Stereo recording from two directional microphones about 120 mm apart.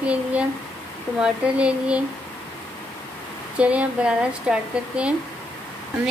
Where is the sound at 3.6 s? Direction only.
10° right (ahead or behind).